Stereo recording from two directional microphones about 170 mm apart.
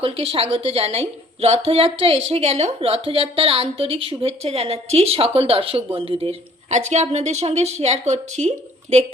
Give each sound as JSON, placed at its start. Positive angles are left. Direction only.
{"t": 0.0, "sound": "a woman's voice", "side_deg": -35}